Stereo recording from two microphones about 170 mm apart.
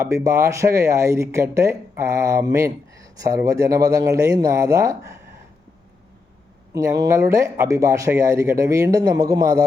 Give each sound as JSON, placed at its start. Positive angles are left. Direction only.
{"t": 0.0, "sound": "speech", "side_deg": -20}
{"t": 6.7, "sound": "a man's voice", "side_deg": -20}